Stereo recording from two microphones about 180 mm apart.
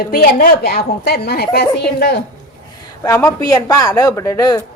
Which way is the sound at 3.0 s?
15° left (ahead or behind).